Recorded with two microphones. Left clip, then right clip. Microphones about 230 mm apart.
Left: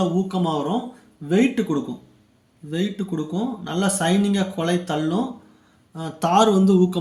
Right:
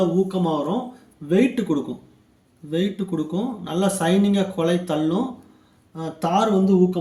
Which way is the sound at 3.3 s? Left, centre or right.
Centre.